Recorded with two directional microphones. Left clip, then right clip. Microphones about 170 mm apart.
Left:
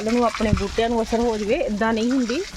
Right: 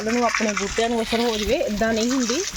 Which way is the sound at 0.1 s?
30° left (ahead or behind).